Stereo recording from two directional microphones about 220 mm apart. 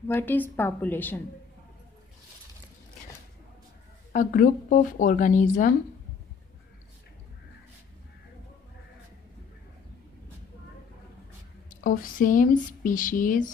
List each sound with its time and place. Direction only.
0.1 s a woman's voice: 10° left (ahead or behind)
4.1 s speech: 35° left (ahead or behind)
11.7 s speech: 40° left (ahead or behind)